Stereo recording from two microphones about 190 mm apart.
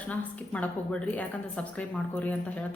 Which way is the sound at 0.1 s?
10° left (ahead or behind).